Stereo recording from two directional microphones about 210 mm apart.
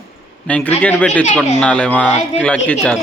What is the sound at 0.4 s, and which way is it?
Speech, 5° left (ahead or behind).